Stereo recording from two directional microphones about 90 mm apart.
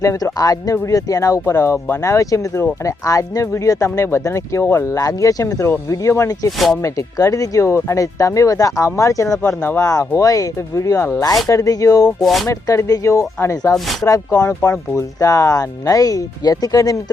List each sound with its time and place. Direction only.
0.0 s speech: 35° left (ahead or behind)
12.2 s speech: centre (ahead or behind)
12.5 s speech: 40° left (ahead or behind)